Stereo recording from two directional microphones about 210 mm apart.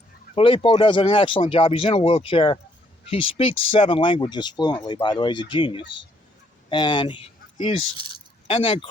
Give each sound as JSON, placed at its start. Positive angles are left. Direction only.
{"t": 0.3, "sound": "speech", "side_deg": 25}